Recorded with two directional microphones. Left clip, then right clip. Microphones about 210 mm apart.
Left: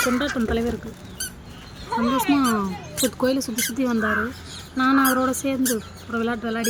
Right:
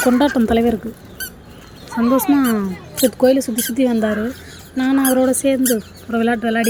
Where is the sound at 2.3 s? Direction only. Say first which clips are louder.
Right 4 dB; 10° right (ahead or behind).